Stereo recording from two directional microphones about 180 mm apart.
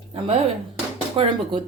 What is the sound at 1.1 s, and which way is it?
Speech, 30° right (ahead or behind).